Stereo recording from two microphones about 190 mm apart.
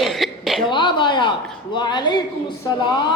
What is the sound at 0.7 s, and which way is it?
Speech, 25° left (ahead or behind).